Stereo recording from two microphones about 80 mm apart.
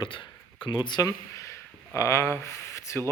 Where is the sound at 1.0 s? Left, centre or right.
Left.